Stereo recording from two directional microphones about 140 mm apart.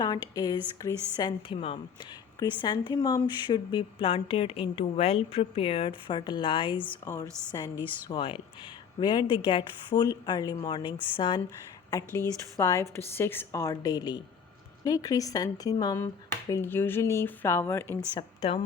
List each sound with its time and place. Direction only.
0.0 s a woman's voice: 30° left (ahead or behind)
1.4 s a woman's voice: 40° left (ahead or behind)
7.5 s a woman's voice: 25° left (ahead or behind)
8.0 s a woman's voice: 35° left (ahead or behind)
11.9 s a woman's voice: 20° left (ahead or behind)
16.5 s speech: 15° left (ahead or behind)
18.1 s a woman's voice: 40° left (ahead or behind)